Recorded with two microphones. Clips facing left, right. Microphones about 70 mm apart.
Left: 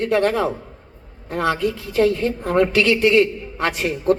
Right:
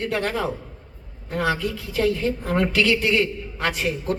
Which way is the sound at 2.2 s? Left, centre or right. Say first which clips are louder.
Left 4 dB; left.